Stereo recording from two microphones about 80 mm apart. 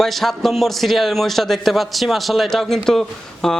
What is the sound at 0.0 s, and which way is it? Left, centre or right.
A man's voice, centre.